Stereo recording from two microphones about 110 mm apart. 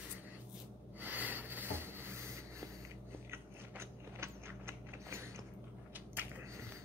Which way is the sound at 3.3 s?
20° right (ahead or behind).